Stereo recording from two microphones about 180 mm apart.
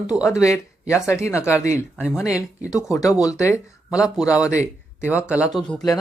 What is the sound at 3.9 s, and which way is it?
Speech, 5° right (ahead or behind).